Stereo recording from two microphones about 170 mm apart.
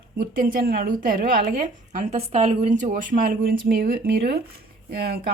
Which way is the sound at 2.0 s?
40° right (ahead or behind).